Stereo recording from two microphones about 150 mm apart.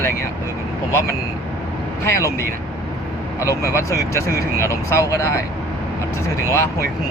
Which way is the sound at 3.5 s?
20° left (ahead or behind).